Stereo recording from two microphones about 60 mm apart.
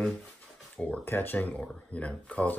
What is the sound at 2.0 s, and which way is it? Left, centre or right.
Speech, left.